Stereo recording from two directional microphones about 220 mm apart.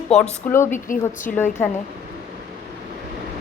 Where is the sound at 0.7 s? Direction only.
35° left (ahead or behind).